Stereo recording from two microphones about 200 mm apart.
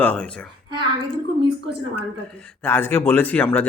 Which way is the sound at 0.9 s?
25° right (ahead or behind).